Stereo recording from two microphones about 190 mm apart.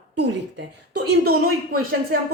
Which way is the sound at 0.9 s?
60° right (ahead or behind).